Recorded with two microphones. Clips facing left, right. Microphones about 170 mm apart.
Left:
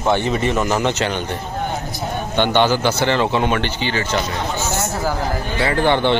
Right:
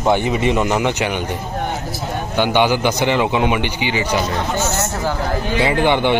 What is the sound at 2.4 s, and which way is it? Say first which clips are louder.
A man's voice: even; 10° right (ahead or behind).